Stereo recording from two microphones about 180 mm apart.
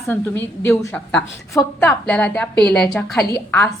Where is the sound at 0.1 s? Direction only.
15° left (ahead or behind).